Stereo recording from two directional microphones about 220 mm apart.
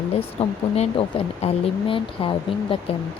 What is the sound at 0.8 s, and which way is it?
Speech, 30° left (ahead or behind).